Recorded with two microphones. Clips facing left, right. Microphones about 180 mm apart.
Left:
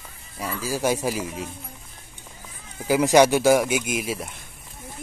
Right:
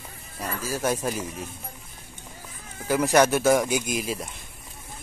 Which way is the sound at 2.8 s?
10° left (ahead or behind).